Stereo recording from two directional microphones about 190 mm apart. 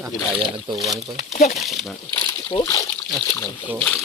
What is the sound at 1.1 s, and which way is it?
Speech, 35° left (ahead or behind).